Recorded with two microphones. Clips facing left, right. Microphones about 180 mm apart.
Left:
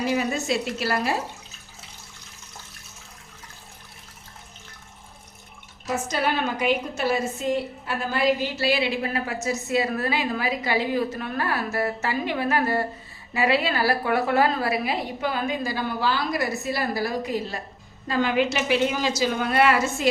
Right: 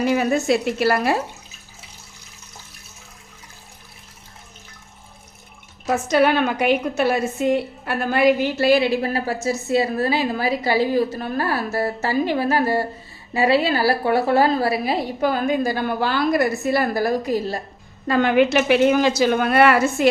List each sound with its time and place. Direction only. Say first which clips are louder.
0.0 s a woman's voice: right 6 dB; 60° right (ahead or behind)
5.8 s a woman's voice: right 8 dB; 65° right (ahead or behind); by 17.6 s 40° right (ahead or behind)
18.1 s a woman's voice: right 6 dB; 60° right (ahead or behind)